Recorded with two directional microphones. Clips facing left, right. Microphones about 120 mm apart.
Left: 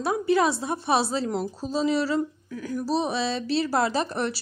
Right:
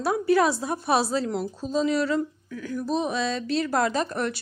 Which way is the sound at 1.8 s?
30° left (ahead or behind).